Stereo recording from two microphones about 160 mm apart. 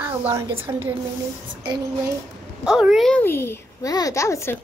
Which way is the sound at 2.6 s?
5° right (ahead or behind).